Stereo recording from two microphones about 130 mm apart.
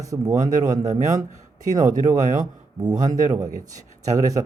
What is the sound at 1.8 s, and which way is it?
Speech, 75° right (ahead or behind).